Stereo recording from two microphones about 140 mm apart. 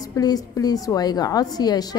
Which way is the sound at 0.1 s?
25° left (ahead or behind).